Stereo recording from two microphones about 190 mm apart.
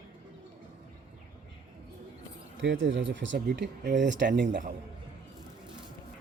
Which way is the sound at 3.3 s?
60° right (ahead or behind).